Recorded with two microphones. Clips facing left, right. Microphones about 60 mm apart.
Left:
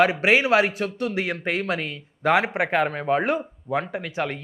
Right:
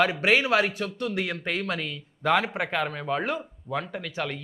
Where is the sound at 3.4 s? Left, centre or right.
Centre.